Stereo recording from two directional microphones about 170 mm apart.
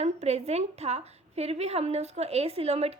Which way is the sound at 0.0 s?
40° right (ahead or behind).